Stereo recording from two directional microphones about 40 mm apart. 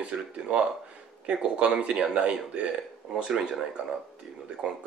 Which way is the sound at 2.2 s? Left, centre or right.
Right.